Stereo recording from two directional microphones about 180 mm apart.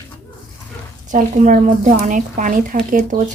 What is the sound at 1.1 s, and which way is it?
Speech, 45° right (ahead or behind).